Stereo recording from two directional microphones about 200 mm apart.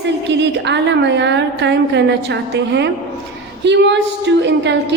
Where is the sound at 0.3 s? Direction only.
60° right (ahead or behind).